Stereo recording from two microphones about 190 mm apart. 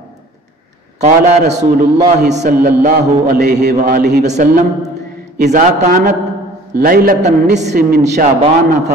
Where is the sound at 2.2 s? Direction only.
40° right (ahead or behind).